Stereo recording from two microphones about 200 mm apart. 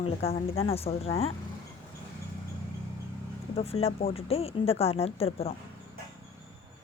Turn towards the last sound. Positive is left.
turn(degrees=30)  # may be behind; listen again after turning